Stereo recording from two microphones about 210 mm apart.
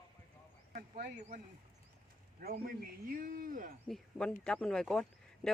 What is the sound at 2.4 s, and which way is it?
A man's voice, 45° right (ahead or behind).